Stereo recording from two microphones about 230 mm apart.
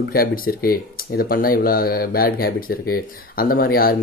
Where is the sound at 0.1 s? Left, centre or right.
Left.